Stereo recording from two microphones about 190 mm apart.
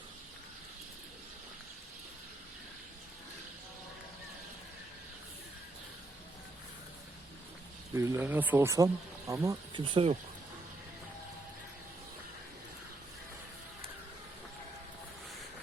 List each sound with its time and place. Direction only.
7.9 s speech: 15° right (ahead or behind)